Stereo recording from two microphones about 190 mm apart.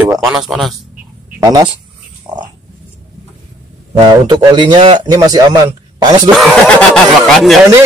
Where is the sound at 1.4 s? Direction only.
20° right (ahead or behind).